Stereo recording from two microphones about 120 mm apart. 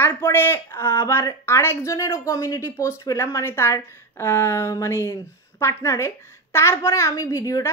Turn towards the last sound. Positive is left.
turn(degrees=30)  # may be behind; listen again after turning